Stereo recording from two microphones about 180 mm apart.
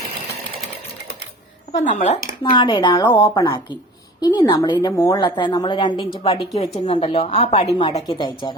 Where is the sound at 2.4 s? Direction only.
25° left (ahead or behind).